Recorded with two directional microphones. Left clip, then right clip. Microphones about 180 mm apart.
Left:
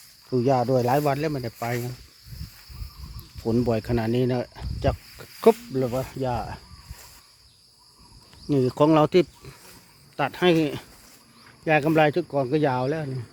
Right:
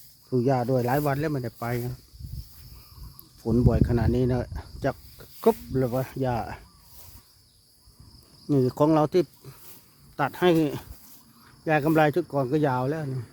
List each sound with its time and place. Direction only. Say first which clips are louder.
0.3 s speech: left 3 dB; centre (ahead or behind)
3.4 s speech: left 1 dB; centre (ahead or behind)
5.1 s cricket: left 5 dB; 10° left (ahead or behind)
5.7 s speech: left 1 dB; 10° right (ahead or behind)
8.4 s speech: left 2 dB; centre (ahead or behind)
10.2 s speech: left 1 dB; 5° right (ahead or behind)